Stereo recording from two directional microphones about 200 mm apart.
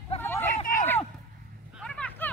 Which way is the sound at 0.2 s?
10° left (ahead or behind).